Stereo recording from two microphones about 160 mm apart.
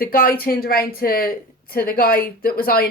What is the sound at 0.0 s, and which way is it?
A woman's voice, 65° left (ahead or behind).